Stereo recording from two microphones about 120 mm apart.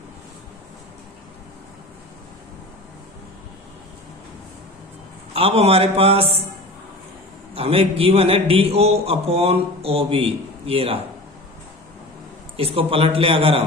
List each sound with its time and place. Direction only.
5.3 s a man's voice: 55° right (ahead or behind)
7.5 s a man's voice: 55° right (ahead or behind)
12.5 s a man's voice: 55° right (ahead or behind)